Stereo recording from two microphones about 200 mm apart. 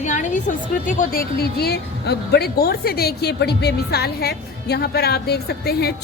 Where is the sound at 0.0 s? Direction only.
40° left (ahead or behind).